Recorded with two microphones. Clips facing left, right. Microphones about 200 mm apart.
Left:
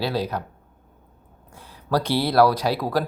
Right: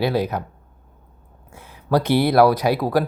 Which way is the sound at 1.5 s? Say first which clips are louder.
Right 4 dB; 15° right (ahead or behind).